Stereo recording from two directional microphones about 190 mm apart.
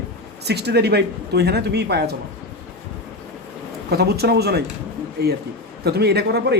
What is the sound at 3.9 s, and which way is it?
Speech, 55° right (ahead or behind).